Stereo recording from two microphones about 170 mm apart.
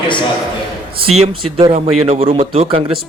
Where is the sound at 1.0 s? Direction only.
30° right (ahead or behind).